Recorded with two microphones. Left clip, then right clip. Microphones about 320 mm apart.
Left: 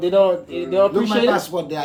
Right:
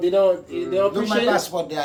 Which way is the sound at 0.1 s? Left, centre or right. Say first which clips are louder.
Left 4 dB; centre.